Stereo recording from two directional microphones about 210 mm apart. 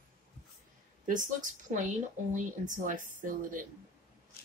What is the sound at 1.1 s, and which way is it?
A woman's voice, 40° right (ahead or behind).